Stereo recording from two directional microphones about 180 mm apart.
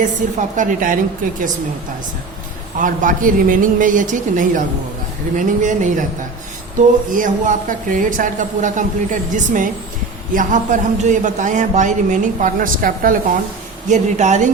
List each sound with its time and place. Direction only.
0.0 s a man's voice: 45° right (ahead or behind)
2.7 s a man's voice: 45° right (ahead or behind)
7.1 s a man's voice: 45° right (ahead or behind)